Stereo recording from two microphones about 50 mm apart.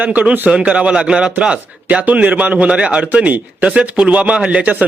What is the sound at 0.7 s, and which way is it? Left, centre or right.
A man's voice, centre.